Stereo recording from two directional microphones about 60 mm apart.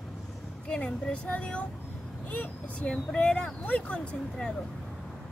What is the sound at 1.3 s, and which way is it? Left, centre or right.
Speech, left.